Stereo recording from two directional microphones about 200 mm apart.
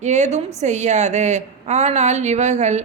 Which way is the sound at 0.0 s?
35° right (ahead or behind).